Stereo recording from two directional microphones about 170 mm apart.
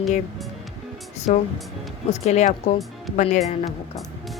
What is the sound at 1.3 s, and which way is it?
Speech, 50° left (ahead or behind).